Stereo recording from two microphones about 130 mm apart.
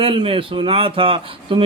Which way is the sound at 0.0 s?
45° right (ahead or behind).